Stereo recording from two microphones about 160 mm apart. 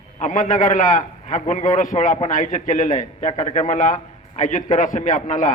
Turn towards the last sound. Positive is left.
turn(degrees=55)  # may be behind; listen again after turning